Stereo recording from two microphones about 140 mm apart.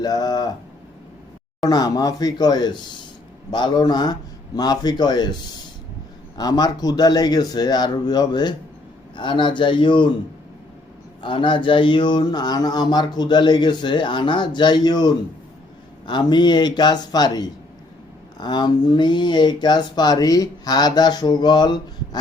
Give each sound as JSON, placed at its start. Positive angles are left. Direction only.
{"t": 0.0, "sound": "a sound", "side_deg": 30}
{"t": 1.6, "sound": "a man's voice", "side_deg": 25}
{"t": 11.2, "sound": "speech", "side_deg": 35}